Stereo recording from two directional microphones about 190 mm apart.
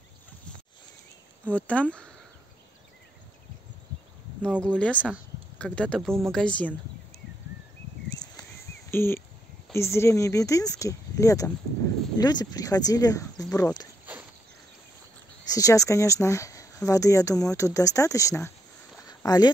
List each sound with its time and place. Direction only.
1.4 s speech: 5° left (ahead or behind)
4.4 s speech: 5° left (ahead or behind)
8.9 s speech: 10° left (ahead or behind)
14.1 s a sound: 10° right (ahead or behind)
15.5 s speech: 15° left (ahead or behind)
19.0 s a sound: 20° left (ahead or behind)